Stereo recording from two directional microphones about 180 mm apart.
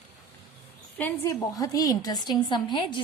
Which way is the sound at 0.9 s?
10° left (ahead or behind).